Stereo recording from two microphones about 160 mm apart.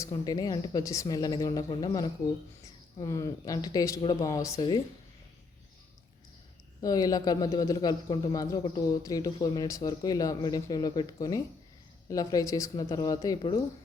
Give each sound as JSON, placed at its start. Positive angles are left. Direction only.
{"t": 0.0, "sound": "speech", "side_deg": 20}
{"t": 6.8, "sound": "speech", "side_deg": 25}